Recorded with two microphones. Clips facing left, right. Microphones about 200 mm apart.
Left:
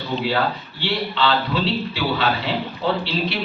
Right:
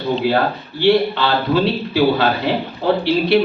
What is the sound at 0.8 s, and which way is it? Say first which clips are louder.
A man's voice: right 9 dB; 60° right (ahead or behind).